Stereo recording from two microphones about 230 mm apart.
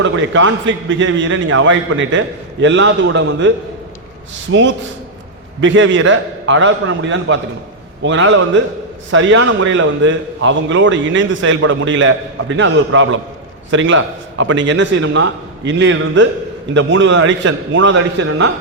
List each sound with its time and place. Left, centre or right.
0.0 s a man's voice: right
4.5 s a man's voice: right